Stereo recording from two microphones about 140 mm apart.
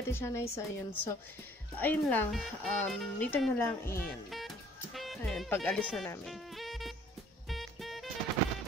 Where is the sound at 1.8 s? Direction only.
15° left (ahead or behind).